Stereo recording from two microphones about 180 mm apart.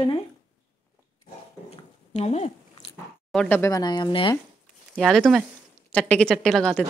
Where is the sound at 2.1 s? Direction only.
40° left (ahead or behind).